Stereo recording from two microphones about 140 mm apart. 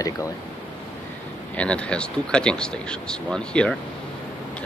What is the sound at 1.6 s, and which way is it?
Speech, 10° left (ahead or behind).